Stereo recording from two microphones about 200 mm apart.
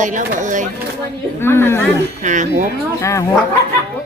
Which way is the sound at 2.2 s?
40° right (ahead or behind).